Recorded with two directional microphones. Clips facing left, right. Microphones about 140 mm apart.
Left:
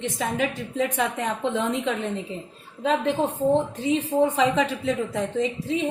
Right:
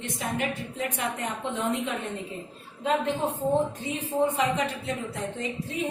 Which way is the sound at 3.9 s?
90° left.